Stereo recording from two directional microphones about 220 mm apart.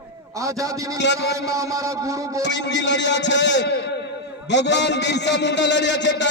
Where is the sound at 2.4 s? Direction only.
55° left (ahead or behind).